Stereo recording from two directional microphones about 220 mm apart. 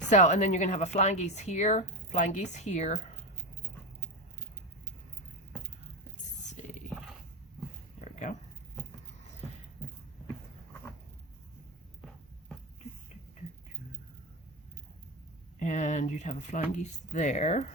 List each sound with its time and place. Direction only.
0.1 s a woman's voice: 35° left (ahead or behind)
8.0 s a sound: 30° left (ahead or behind)
15.5 s a woman's voice: 35° left (ahead or behind)